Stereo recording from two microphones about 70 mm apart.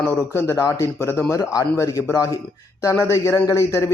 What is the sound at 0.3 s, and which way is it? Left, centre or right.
Speech, left.